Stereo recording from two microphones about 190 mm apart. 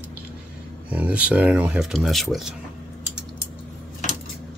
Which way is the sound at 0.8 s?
10° right (ahead or behind).